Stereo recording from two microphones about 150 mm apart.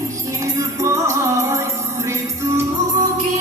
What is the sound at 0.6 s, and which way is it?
Music, 20° right (ahead or behind).